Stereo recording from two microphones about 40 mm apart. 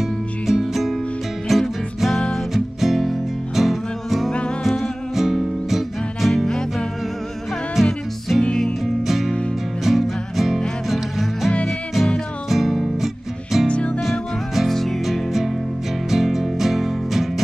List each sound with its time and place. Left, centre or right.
0.0 s music: centre
5.1 s music: centre
6.3 s music: centre
7.8 s music: centre
8.8 s music: centre
13.7 s music: left
15.0 s music: centre